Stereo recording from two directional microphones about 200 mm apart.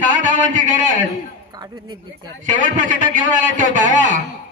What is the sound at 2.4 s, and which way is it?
A man's voice, 40° right (ahead or behind).